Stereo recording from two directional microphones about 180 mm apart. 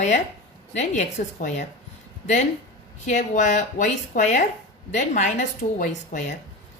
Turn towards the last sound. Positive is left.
turn(degrees=45)  # may be behind; listen again after turning